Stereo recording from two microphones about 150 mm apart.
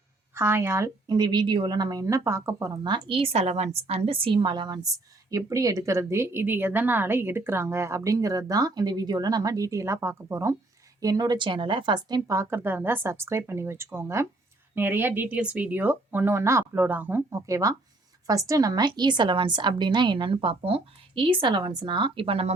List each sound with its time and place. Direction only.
0.3 s a woman's voice: 15° right (ahead or behind); by 22.5 s 40° right (ahead or behind)